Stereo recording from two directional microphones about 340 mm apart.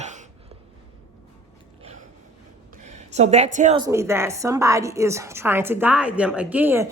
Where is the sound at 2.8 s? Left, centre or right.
Centre.